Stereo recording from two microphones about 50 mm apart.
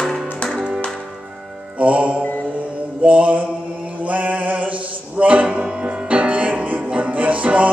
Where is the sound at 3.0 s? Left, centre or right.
Right.